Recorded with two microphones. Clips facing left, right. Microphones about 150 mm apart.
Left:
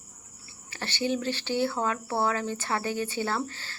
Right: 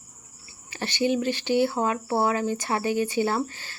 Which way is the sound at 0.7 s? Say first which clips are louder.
Right 5 dB; 15° right (ahead or behind).